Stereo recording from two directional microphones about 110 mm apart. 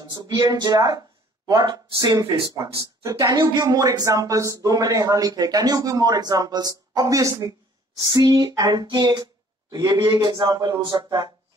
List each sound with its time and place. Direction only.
0.1 s a man's voice: 35° right (ahead or behind)